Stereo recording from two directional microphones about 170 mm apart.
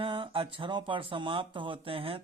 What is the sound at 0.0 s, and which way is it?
Speech, 30° right (ahead or behind).